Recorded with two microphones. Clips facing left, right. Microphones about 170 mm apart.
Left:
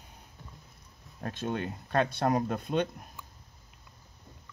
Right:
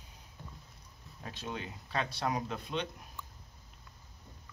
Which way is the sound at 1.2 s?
55° left (ahead or behind).